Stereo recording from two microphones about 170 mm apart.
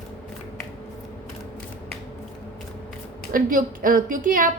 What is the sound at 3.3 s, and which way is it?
A woman's voice, 55° right (ahead or behind).